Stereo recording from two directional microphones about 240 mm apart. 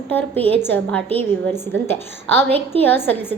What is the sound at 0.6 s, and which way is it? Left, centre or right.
A woman's voice, centre.